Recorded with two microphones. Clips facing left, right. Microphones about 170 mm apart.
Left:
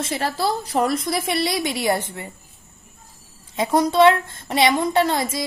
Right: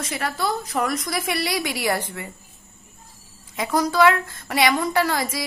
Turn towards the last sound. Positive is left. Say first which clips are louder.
# left 3 dB
turn(degrees=25)  # may be behind; listen again after turning